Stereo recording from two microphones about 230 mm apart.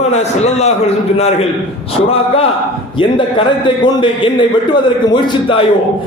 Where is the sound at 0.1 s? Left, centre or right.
Left.